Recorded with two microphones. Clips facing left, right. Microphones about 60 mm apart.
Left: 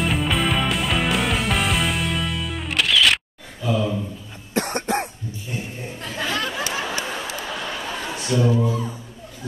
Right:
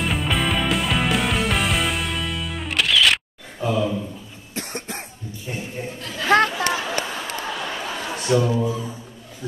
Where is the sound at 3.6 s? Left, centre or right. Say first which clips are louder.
Even; right.